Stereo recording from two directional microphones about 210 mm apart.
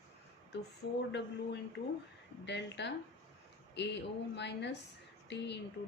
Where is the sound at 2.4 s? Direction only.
55° left (ahead or behind).